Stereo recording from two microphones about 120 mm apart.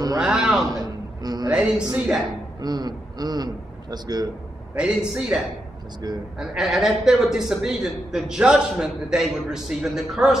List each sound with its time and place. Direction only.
0.2 s a man's voice: 5° right (ahead or behind)
0.7 s a sound: 35° right (ahead or behind)
1.5 s speech: 10° right (ahead or behind)
2.6 s a man's voice: 35° right (ahead or behind)
4.7 s a man's voice: 5° right (ahead or behind)